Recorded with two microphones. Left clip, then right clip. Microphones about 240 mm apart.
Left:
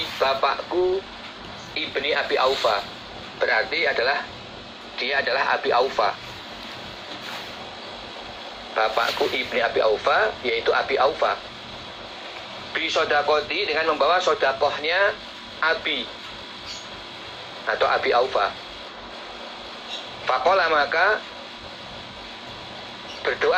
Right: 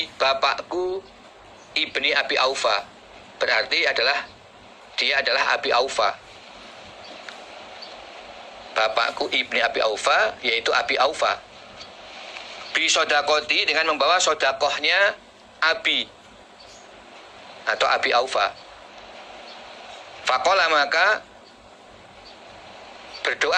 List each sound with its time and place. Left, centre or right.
0.2 s speech: right
1.7 s a man's voice: right
8.7 s a man's voice: right
12.7 s a man's voice: right
17.7 s a man's voice: right
20.2 s a man's voice: right
23.2 s a man's voice: right